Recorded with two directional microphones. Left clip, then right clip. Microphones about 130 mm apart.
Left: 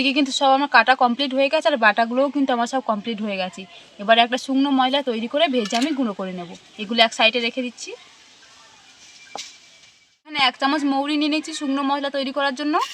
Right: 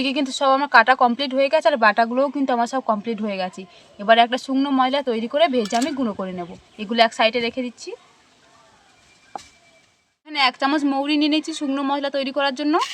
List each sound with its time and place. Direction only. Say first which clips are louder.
0.0 s speech: left 2 dB; 20° right (ahead or behind)
10.2 s speech: even; 15° right (ahead or behind)